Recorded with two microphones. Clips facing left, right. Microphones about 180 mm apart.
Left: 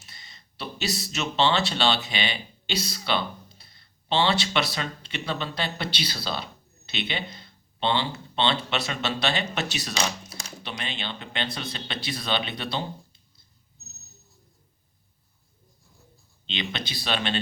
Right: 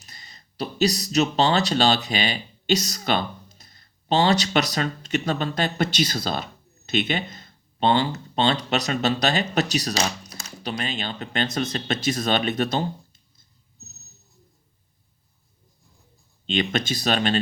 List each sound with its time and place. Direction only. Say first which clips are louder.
0.0 s speech: right 2 dB; 40° right (ahead or behind)
16.5 s speech: right 9 dB; 45° right (ahead or behind)